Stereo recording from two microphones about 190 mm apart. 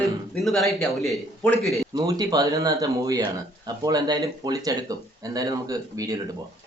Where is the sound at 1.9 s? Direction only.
20° right (ahead or behind).